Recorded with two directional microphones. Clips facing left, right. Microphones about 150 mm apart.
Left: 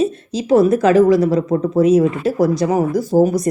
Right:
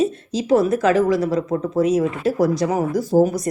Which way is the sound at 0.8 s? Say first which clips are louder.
Left 5 dB; 25° left (ahead or behind).